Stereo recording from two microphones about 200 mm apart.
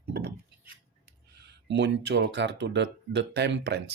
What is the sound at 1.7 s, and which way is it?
Speech, 60° right (ahead or behind).